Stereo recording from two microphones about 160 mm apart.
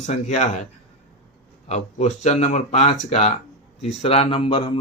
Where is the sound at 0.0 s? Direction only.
45° left (ahead or behind).